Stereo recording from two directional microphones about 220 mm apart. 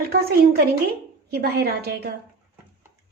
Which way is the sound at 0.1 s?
45° right (ahead or behind).